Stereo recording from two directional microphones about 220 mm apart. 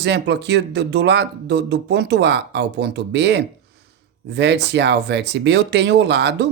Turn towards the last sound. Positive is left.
turn(degrees=-50)  # may be behind; listen again after turning